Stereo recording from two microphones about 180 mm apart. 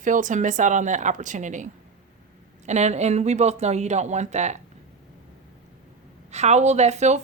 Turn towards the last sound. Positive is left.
turn(degrees=-40)  # may be behind; listen again after turning